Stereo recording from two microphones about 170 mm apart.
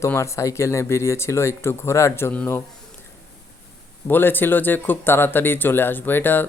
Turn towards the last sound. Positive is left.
turn(degrees=10)  # may be behind; listen again after turning